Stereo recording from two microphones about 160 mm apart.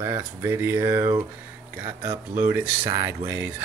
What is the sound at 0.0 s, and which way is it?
Speech, 15° right (ahead or behind).